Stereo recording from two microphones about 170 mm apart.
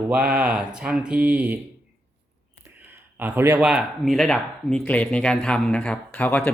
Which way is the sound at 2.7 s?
10° right (ahead or behind).